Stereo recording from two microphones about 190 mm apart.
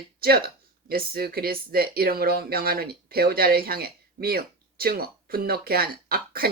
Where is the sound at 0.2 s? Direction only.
55° right (ahead or behind).